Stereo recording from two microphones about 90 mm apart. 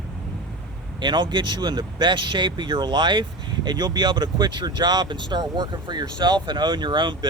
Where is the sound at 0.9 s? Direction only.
55° right (ahead or behind).